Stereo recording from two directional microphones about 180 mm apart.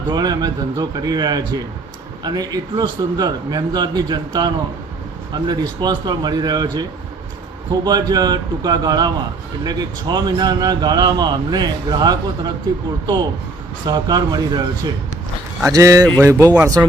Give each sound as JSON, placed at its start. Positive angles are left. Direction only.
{"t": 0.1, "sound": "a man's voice", "side_deg": -20}
{"t": 7.9, "sound": "a man's voice", "side_deg": -20}
{"t": 13.8, "sound": "a man's voice", "side_deg": -20}